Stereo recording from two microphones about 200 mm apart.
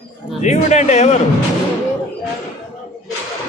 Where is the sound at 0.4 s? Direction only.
35° left (ahead or behind).